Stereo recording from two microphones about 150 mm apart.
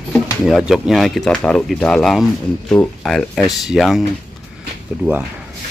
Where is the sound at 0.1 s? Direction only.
Centre (ahead or behind).